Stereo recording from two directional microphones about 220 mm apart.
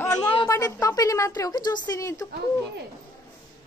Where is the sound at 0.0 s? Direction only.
15° left (ahead or behind).